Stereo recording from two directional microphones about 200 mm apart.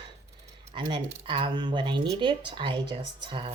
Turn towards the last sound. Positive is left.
turn(degrees=-25)  # may be behind; listen again after turning